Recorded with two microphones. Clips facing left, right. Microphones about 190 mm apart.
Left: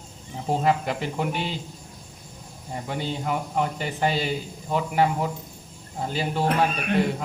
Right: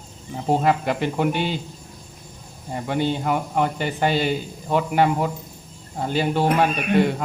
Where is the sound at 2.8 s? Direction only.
75° right (ahead or behind).